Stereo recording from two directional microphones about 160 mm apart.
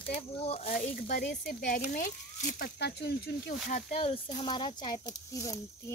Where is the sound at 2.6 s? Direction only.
90° left.